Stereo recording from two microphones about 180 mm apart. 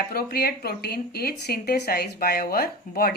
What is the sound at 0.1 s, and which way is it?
Speech, 60° left (ahead or behind).